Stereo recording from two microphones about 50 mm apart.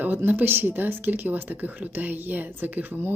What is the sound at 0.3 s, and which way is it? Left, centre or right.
Speech, right.